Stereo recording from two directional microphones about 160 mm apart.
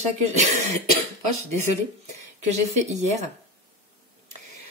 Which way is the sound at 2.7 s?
45° right (ahead or behind).